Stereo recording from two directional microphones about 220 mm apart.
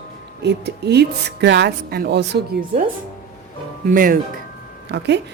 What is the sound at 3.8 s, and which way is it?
Speech, 40° right (ahead or behind).